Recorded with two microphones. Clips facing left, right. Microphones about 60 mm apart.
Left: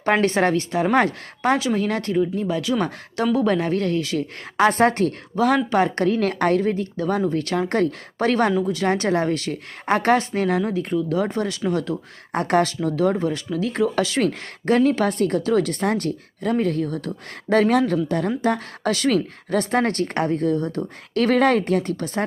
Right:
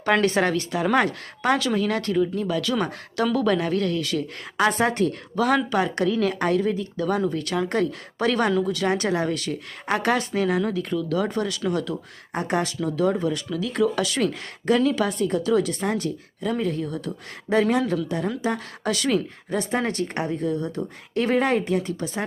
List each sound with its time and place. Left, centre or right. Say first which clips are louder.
0.0 s speech: left 2 dB; left
4.5 s a woman's voice: left 4 dB; left
5.4 s speech: left 3 dB; left
5.7 s a woman's voice: left 3 dB; left
12.3 s speech: left 5 dB; left
12.8 s a woman's voice: left 2 dB; left
17.5 s a woman's voice: left 3 dB; left
19.1 s speech: left 3 dB; left